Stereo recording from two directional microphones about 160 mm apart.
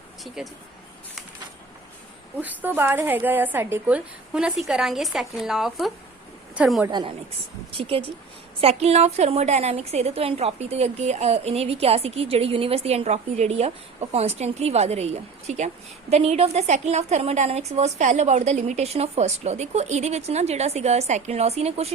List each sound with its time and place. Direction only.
2.4 s a woman's voice: 10° right (ahead or behind)
6.8 s a woman's voice: 30° right (ahead or behind)